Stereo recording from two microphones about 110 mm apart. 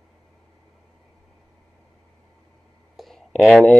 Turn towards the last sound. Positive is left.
turn(degrees=5)  # may be behind; listen again after turning